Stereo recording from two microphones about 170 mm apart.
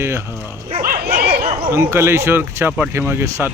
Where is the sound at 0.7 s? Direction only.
55° right (ahead or behind).